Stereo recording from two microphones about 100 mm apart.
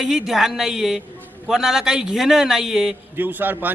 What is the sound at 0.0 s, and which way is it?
Speech, 5° right (ahead or behind).